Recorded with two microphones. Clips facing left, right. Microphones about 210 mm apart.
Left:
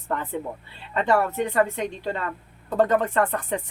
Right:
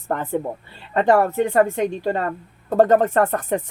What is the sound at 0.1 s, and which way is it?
Speech, 45° right (ahead or behind).